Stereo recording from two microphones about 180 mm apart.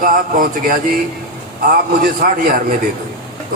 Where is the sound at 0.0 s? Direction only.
50° right (ahead or behind).